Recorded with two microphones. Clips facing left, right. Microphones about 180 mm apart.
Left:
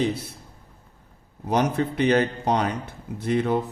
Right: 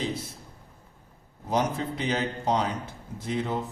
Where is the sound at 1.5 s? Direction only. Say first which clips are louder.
Left 4 dB; 65° left (ahead or behind).